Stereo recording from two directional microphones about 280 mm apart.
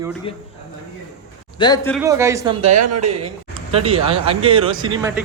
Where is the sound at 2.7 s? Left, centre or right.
Right.